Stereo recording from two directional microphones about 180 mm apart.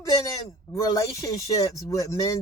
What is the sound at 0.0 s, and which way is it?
Speech, 20° left (ahead or behind).